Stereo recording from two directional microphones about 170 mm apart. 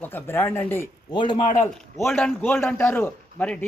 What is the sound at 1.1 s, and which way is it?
Speech, 25° left (ahead or behind).